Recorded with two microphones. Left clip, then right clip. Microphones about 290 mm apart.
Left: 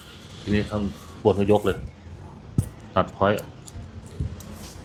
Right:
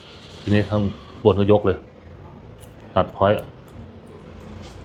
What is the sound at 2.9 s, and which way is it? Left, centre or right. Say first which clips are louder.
Speech: right 3 dB; centre.